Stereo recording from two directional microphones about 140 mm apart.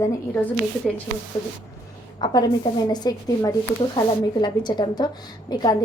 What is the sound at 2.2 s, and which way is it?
A woman's voice, 30° left (ahead or behind).